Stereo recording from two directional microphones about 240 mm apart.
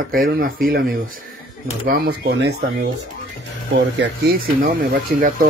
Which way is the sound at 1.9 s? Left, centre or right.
Right.